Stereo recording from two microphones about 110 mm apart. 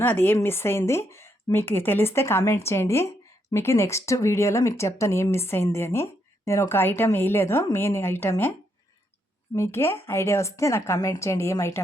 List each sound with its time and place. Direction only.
0.0 s speech: 20° left (ahead or behind)
9.6 s speech: 25° left (ahead or behind)